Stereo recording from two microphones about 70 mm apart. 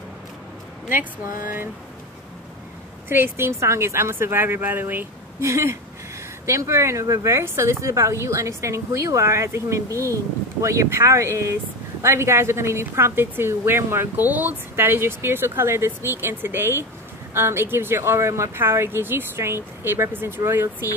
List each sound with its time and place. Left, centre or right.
3.1 s a woman's voice: right
5.4 s a woman's voice: right